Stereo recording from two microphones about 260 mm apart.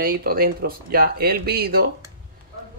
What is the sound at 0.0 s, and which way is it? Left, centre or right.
Speech, right.